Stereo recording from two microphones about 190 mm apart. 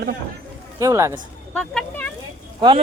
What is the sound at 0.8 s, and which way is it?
Speech, 15° right (ahead or behind).